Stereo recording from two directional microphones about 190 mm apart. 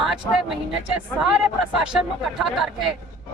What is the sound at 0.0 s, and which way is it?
Speech, centre (ahead or behind).